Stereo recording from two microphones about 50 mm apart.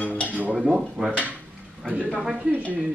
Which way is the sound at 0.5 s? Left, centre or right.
Centre.